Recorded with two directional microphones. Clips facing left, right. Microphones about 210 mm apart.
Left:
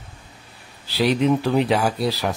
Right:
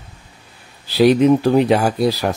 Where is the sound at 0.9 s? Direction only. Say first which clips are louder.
Right 7 dB; 45° right (ahead or behind).